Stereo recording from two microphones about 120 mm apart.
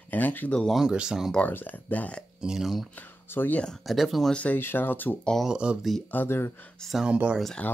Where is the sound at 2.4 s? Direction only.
5° right (ahead or behind).